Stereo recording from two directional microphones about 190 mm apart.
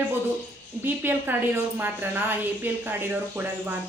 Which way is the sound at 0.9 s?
10° right (ahead or behind).